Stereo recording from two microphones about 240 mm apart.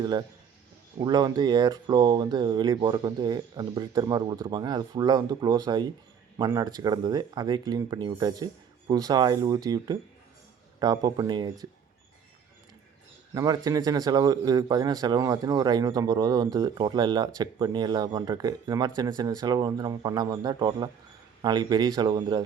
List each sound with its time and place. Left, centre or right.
0.0 s a man's voice: centre
13.3 s a man's voice: centre